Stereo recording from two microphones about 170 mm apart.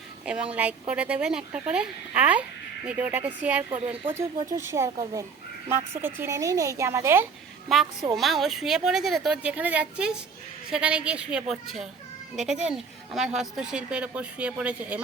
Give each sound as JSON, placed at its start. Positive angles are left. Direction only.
{"t": 0.3, "sound": "speech", "side_deg": -10}
{"t": 3.7, "sound": "speech", "side_deg": -30}
{"t": 4.4, "sound": "speech", "side_deg": -15}
{"t": 7.7, "sound": "a woman's voice", "side_deg": 0}